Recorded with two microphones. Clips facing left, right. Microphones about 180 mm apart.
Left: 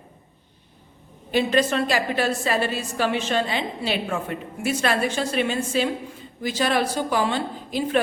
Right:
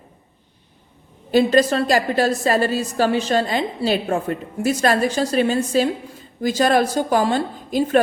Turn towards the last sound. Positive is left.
turn(degrees=-45)  # may be behind; listen again after turning